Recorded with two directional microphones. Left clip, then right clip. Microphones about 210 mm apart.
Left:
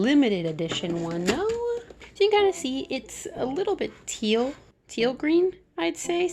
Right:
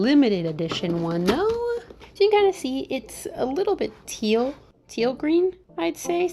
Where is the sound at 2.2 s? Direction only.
5° right (ahead or behind).